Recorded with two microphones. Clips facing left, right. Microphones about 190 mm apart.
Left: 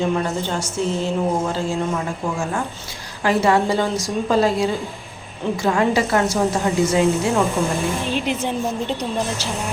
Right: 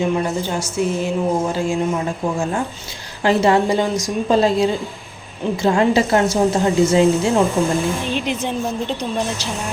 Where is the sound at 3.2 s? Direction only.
25° right (ahead or behind).